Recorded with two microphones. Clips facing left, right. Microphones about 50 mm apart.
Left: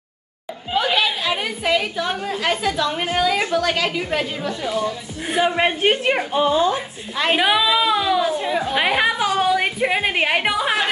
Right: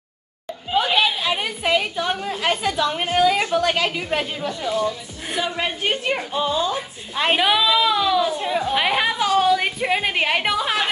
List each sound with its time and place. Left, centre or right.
0.7 s a woman's voice: centre
5.3 s a woman's voice: left
7.3 s speech: centre
8.4 s a woman's voice: centre